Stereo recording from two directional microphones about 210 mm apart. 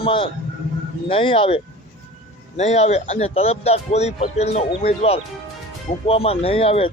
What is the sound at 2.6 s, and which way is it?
Speech, 30° left (ahead or behind).